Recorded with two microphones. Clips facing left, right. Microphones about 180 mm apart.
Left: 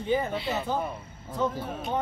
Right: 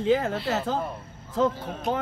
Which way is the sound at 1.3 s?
90° right.